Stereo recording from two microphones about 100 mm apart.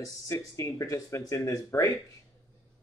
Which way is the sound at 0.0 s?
35° left (ahead or behind).